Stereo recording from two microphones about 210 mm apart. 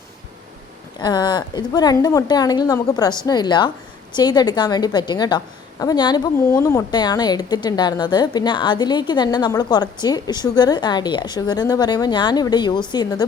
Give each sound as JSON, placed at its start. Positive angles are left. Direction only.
{"t": 1.0, "sound": "a woman's voice", "side_deg": 20}